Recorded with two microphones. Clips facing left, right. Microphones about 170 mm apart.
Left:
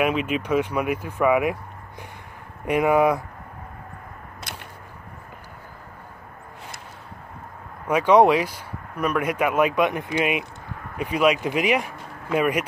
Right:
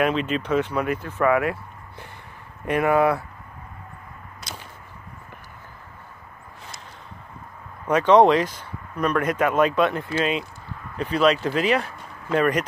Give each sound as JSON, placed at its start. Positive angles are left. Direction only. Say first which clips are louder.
{"t": 0.0, "sound": "speech", "louder": "even", "side_deg": 10}
{"t": 4.5, "sound": "whip", "louder": "right 1 dB", "side_deg": 55}
{"t": 7.8, "sound": "speech", "louder": "right 1 dB", "side_deg": 10}